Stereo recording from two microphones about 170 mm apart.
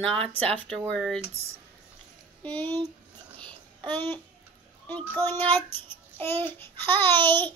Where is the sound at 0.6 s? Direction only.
5° left (ahead or behind).